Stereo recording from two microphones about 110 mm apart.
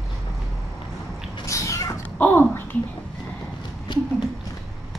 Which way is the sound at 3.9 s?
45° left (ahead or behind).